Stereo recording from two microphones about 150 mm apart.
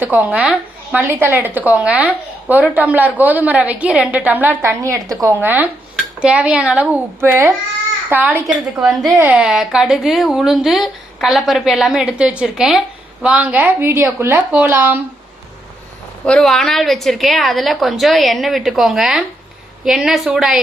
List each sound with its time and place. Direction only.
0.0 s a woman's voice: 10° right (ahead or behind)
9.1 s a woman's voice: 10° right (ahead or behind)
16.2 s speech: 5° left (ahead or behind)